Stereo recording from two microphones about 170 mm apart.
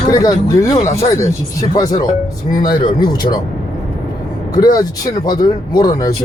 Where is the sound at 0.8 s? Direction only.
40° left (ahead or behind).